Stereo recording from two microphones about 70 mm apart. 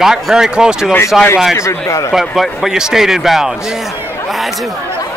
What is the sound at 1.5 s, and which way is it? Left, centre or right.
Speech, left.